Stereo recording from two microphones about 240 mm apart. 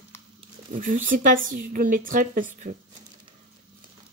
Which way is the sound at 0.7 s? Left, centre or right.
Right.